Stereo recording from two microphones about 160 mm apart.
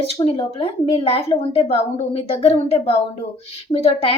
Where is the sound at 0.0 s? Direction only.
35° left (ahead or behind).